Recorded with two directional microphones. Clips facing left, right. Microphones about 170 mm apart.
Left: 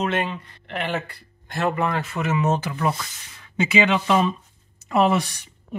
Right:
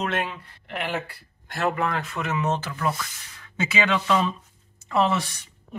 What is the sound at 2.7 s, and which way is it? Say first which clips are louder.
Speech: left 3 dB; 20° left (ahead or behind).